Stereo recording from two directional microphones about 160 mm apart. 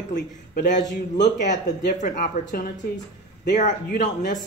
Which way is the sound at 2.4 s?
90° left.